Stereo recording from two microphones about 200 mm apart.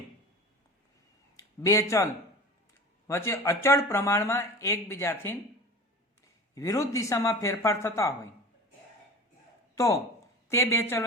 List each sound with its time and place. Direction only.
1.4 s speech: 15° left (ahead or behind)
3.1 s speech: 15° left (ahead or behind)
6.5 s speech: 15° left (ahead or behind)
9.7 s speech: 15° left (ahead or behind)